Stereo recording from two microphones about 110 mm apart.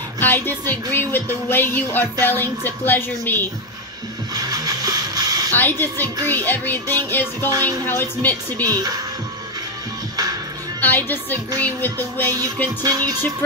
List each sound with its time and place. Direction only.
0.2 s music: 15° left (ahead or behind)
4.3 s vehicle: 35° right (ahead or behind)
5.5 s speech: 20° left (ahead or behind)
6.2 s music: 20° left (ahead or behind)
8.6 s speech: 35° right (ahead or behind)
10.8 s music: 20° left (ahead or behind)
12.8 s speech: 35° right (ahead or behind)